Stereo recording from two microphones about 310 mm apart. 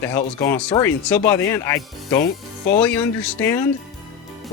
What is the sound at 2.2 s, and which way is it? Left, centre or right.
Speech, left.